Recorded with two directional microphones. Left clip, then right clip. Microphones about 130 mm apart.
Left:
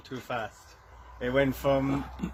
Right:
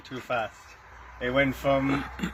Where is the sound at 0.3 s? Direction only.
30° left (ahead or behind).